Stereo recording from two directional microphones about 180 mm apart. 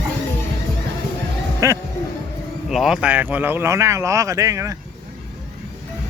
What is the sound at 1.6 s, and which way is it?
Speech, 15° right (ahead or behind).